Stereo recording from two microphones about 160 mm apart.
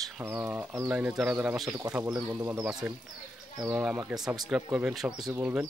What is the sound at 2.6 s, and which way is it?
Speech, 5° right (ahead or behind).